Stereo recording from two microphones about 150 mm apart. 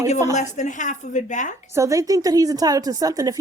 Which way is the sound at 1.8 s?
20° right (ahead or behind).